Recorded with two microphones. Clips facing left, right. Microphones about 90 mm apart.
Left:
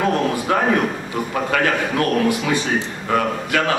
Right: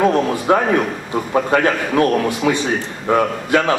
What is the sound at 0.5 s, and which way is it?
A man's voice, 25° right (ahead or behind).